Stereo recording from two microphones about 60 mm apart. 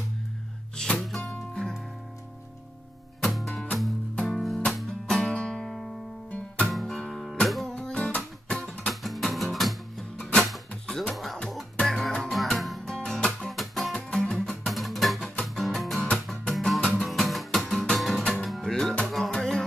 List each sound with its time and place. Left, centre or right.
0.9 s music: centre
1.5 s music: centre
3.2 s music: centre
7.6 s music: centre
13.9 s music: centre
14.6 s music: centre